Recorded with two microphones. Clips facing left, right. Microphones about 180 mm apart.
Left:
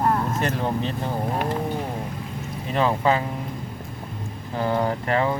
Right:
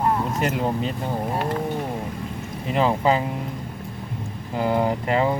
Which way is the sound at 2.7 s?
10° right (ahead or behind).